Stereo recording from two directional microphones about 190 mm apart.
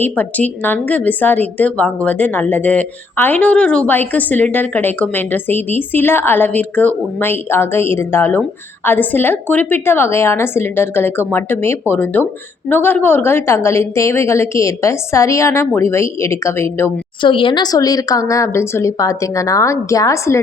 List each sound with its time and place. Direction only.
0.0 s a woman's voice: 10° left (ahead or behind)
17.2 s a woman's voice: 25° left (ahead or behind)